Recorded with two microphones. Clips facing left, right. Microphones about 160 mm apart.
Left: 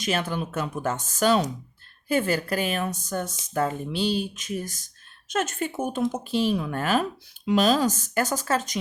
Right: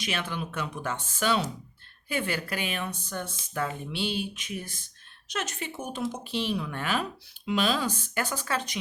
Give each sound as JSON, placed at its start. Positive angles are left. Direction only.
{"t": 0.0, "sound": "speech", "side_deg": 45}